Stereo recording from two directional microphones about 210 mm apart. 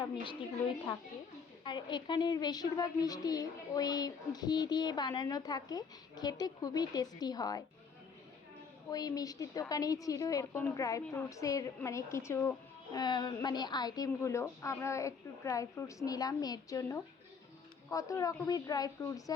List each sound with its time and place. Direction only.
1.6 s a woman's voice: 20° left (ahead or behind)
8.9 s a woman's voice: 15° left (ahead or behind)